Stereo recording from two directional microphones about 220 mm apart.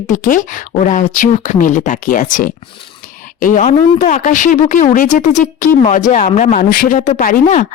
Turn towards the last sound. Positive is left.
turn(degrees=35)  # may be behind; listen again after turning